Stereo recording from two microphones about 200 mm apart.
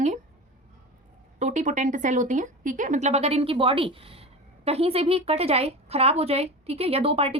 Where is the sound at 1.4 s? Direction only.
35° right (ahead or behind).